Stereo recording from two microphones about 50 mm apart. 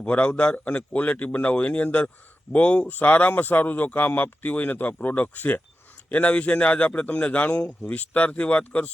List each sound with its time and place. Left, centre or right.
0.0 s a man's voice: left